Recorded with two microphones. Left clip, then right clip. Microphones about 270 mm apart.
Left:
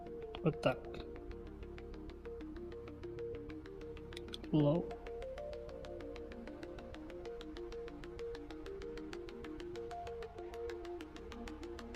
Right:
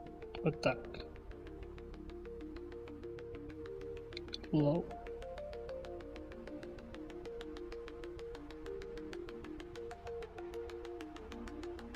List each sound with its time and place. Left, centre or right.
0.3 s speech: centre
4.5 s music: centre